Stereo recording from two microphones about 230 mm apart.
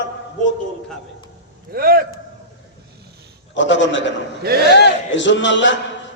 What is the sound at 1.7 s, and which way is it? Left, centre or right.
Speech, right.